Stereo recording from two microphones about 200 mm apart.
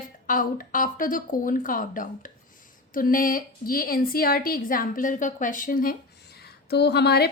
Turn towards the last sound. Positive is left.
turn(degrees=55)  # may be behind; listen again after turning